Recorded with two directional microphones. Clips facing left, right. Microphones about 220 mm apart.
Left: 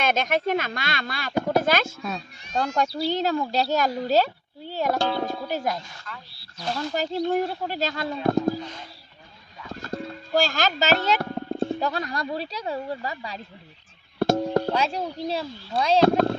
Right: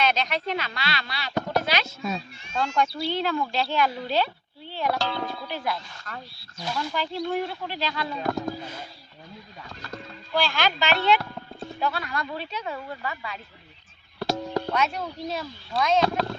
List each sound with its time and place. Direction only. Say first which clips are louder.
0.0 s speech: left 3 dB; 50° left (ahead or behind)
2.0 s speech: right 2 dB; centre (ahead or behind)
2.5 s speech: left 1 dB; 40° left (ahead or behind)
6.1 s speech: right 6 dB; 45° right (ahead or behind)
6.7 s speech: left 3 dB; 45° left (ahead or behind)
8.2 s speech: left 7 dB; 35° left (ahead or behind)
10.3 s speech: left 2 dB; 45° left (ahead or behind)
14.2 s music: left 6 dB; 50° left (ahead or behind)
14.7 s speech: left 2 dB; 30° left (ahead or behind)
16.0 s speech: left 6 dB; 50° left (ahead or behind)